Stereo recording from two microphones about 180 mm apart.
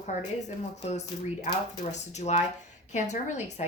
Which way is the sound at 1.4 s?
40° left (ahead or behind).